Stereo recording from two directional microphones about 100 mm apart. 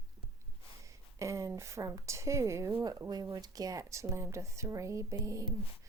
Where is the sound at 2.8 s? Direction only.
40° right (ahead or behind).